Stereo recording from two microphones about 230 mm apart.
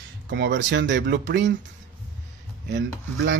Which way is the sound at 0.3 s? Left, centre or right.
Right.